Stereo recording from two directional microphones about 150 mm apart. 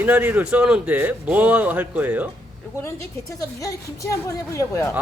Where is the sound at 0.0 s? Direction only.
10° right (ahead or behind).